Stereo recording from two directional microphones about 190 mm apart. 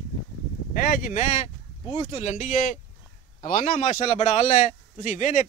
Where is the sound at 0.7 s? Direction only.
50° left (ahead or behind).